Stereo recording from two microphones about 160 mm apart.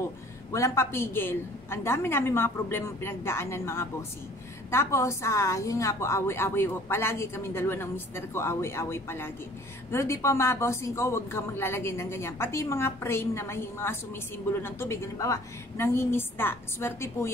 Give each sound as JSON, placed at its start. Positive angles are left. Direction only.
{"t": 0.5, "sound": "speech", "side_deg": 20}